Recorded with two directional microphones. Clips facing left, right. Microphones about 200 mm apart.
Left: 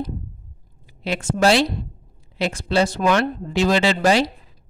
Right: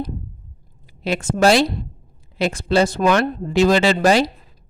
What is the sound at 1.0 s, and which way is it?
Speech, 45° right (ahead or behind).